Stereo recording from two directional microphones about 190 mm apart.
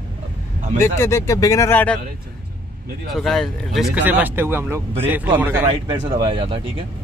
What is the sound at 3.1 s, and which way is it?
Speech, centre (ahead or behind).